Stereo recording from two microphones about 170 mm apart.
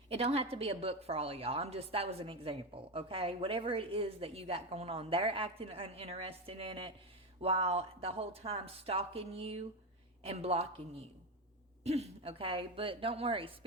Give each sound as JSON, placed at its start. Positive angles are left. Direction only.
{"t": 0.1, "sound": "a woman's voice", "side_deg": -35}